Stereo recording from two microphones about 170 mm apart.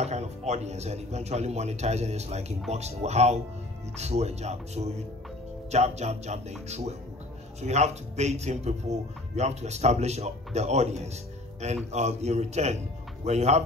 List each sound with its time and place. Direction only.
0.0 s speech: 40° right (ahead or behind)